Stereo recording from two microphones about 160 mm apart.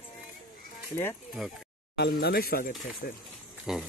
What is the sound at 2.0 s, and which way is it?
Speech, 90° left.